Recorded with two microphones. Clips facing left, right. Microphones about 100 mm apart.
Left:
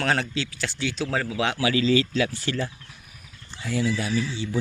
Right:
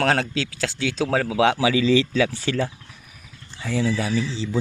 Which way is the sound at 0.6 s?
90° right.